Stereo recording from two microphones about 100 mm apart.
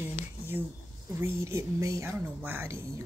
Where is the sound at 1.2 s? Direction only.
30° right (ahead or behind).